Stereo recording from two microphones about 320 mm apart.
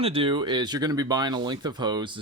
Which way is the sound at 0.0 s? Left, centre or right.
Centre.